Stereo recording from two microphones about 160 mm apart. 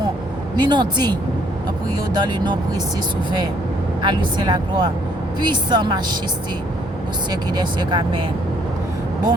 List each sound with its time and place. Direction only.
0.5 s speech: 25° right (ahead or behind)
4.0 s speech: 30° right (ahead or behind)
7.3 s speech: 25° right (ahead or behind)